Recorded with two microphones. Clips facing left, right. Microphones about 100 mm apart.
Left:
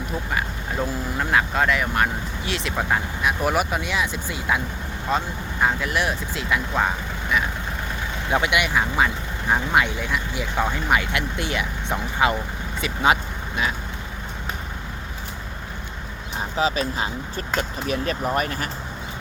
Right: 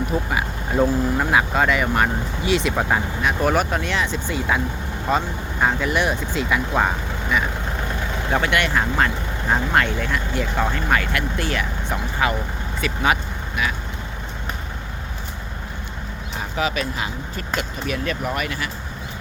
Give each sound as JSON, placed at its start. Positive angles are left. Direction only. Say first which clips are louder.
{"t": 0.1, "sound": "speech", "louder": "right 3 dB", "side_deg": -5}
{"t": 8.3, "sound": "speech", "louder": "right 1 dB", "side_deg": 15}
{"t": 16.6, "sound": "speech", "louder": "left 1 dB", "side_deg": 30}